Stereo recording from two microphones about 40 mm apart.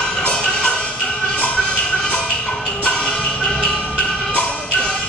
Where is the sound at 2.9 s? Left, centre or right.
Centre.